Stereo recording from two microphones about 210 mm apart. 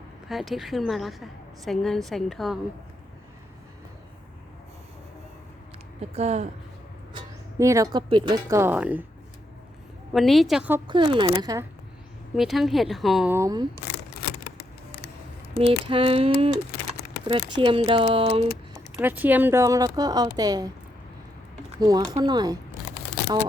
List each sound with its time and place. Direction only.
0.3 s a woman's voice: centre (ahead or behind)
6.0 s speech: 30° right (ahead or behind)
7.6 s a woman's voice: 15° right (ahead or behind)
10.1 s a woman's voice: centre (ahead or behind)
10.8 s speech: 20° right (ahead or behind)
12.4 s a woman's voice: centre (ahead or behind)
13.3 s a woman's voice: 15° right (ahead or behind)
13.8 s a sound: 50° left (ahead or behind)
15.5 s speech: 25° right (ahead or behind)
18.9 s a woman's voice: 10° right (ahead or behind)
21.8 s a woman's voice: 15° right (ahead or behind)